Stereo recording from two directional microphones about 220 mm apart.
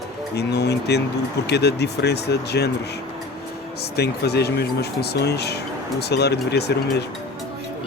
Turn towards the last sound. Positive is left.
turn(degrees=50)  # may be behind; listen again after turning